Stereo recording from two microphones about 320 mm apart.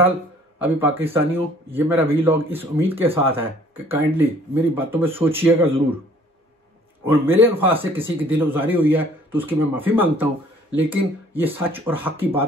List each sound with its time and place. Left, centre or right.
0.6 s speech: centre
7.1 s speech: centre
8.3 s a man's voice: centre